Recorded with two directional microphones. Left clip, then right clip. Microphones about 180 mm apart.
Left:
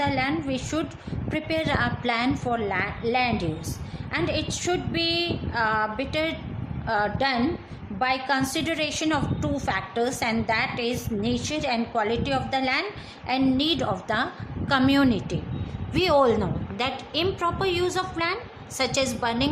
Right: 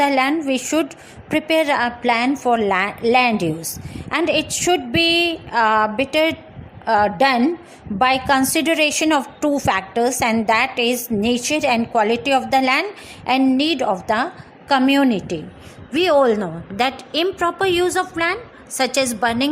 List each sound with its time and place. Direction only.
0.0 s a woman's voice: 40° right (ahead or behind)